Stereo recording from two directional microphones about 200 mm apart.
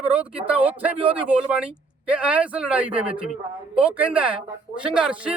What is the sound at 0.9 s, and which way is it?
Speech, 25° right (ahead or behind).